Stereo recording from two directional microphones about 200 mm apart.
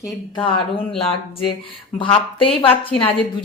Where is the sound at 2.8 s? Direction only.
25° left (ahead or behind).